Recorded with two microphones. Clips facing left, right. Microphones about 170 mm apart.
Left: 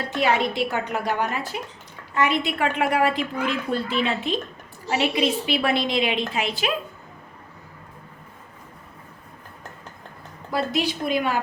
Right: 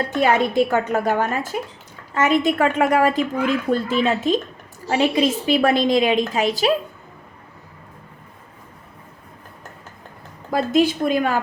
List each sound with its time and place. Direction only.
0.2 s a woman's voice: 45° right (ahead or behind)
10.5 s a woman's voice: 50° right (ahead or behind)